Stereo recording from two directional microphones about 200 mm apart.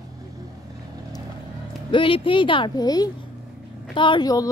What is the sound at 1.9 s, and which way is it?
A woman's voice, 25° left (ahead or behind).